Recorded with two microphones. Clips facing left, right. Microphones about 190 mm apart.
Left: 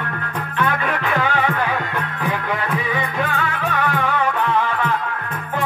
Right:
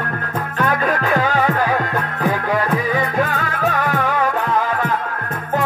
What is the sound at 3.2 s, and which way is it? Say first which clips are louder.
Music: right 2 dB; 40° right (ahead or behind).